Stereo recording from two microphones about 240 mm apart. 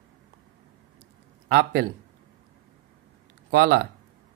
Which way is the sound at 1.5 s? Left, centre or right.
Right.